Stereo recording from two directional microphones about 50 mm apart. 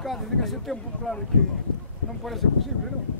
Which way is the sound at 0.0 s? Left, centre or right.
Centre.